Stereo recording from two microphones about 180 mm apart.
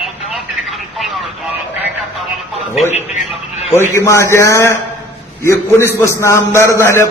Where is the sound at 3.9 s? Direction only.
15° left (ahead or behind).